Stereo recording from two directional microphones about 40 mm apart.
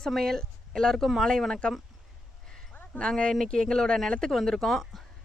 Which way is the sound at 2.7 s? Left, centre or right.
Left.